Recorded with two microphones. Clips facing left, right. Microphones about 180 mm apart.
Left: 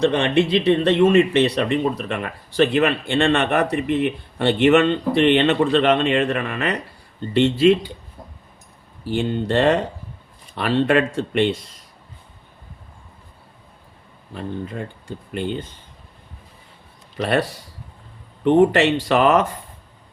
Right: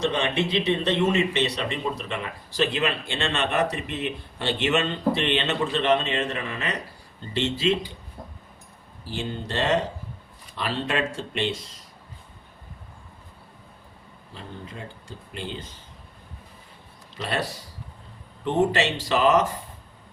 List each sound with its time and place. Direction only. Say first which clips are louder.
0.0 s speech: left 7 dB; 60° left (ahead or behind)
9.0 s speech: left 10 dB; 60° left (ahead or behind)
14.3 s speech: left 10 dB; 55° left (ahead or behind)
17.2 s speech: left 9 dB; 60° left (ahead or behind)
18.4 s speech: left 8 dB; 60° left (ahead or behind)